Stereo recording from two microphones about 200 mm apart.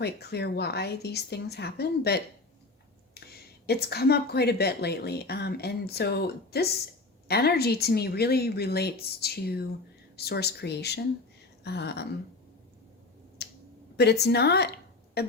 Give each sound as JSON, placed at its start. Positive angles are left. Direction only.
{"t": 0.0, "sound": "speech", "side_deg": 55}
{"t": 3.2, "sound": "a sound", "side_deg": 50}
{"t": 3.7, "sound": "a woman's voice", "side_deg": 55}
{"t": 13.4, "sound": "finger snapping", "side_deg": 55}
{"t": 13.9, "sound": "a woman's voice", "side_deg": 55}